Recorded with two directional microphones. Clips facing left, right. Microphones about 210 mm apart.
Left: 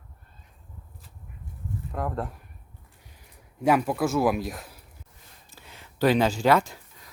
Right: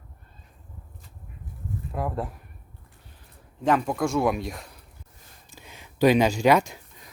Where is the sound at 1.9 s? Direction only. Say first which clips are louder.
Right 1 dB; 5° right (ahead or behind).